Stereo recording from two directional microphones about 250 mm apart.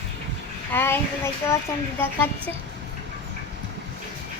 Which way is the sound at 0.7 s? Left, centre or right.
Centre.